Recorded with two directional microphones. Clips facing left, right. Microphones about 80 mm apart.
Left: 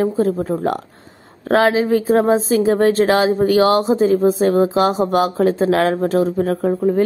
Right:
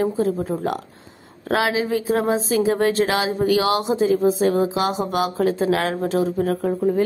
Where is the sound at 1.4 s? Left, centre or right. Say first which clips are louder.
Left 6 dB; left.